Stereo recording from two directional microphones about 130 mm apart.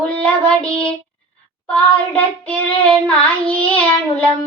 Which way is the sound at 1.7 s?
10° left (ahead or behind).